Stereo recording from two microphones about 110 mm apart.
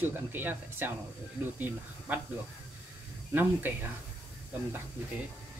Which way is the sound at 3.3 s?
15° right (ahead or behind).